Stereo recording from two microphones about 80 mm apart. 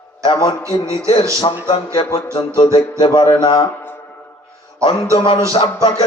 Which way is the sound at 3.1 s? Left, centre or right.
Left.